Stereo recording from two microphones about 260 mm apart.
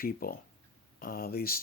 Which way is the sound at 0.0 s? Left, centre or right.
Left.